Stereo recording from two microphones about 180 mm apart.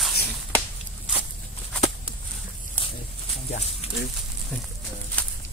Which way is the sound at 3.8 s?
35° left (ahead or behind).